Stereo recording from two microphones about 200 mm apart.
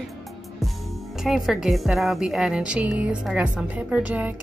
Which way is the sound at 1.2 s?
Centre (ahead or behind).